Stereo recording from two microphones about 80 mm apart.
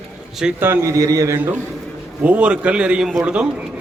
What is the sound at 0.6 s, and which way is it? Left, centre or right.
Speech, right.